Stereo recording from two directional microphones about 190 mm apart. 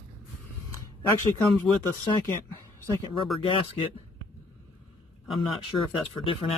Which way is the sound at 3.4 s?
25° left (ahead or behind).